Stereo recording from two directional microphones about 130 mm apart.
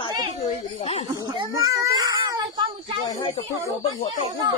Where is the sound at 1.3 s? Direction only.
30° right (ahead or behind).